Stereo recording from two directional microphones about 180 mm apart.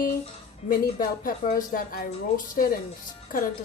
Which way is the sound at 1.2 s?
50° left (ahead or behind).